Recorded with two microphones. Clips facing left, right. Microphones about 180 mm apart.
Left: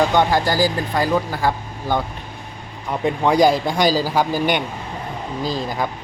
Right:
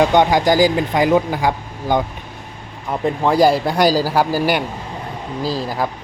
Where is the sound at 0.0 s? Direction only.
20° right (ahead or behind).